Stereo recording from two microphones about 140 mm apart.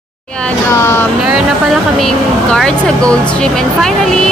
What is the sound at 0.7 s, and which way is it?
Vehicle, 20° left (ahead or behind).